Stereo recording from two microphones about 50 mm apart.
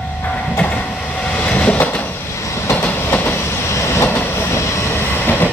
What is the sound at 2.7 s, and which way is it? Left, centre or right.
Train, left.